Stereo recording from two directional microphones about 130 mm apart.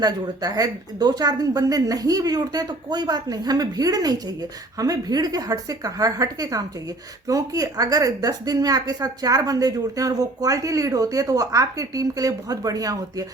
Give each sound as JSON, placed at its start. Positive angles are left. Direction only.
{"t": 0.0, "sound": "speech", "side_deg": -30}